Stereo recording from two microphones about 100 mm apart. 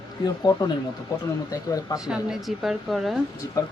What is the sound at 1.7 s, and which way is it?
Speech, 35° left (ahead or behind).